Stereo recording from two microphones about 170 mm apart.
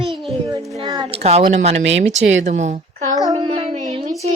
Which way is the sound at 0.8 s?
25° right (ahead or behind).